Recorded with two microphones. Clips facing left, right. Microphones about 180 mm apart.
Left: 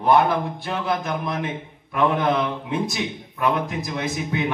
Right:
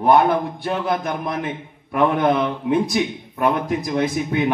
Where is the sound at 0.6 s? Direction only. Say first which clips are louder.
Right 3 dB; 50° right (ahead or behind).